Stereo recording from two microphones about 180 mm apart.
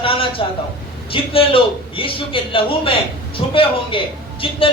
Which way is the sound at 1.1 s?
30° left (ahead or behind).